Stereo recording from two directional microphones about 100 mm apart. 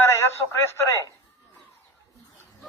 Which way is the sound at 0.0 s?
30° left (ahead or behind).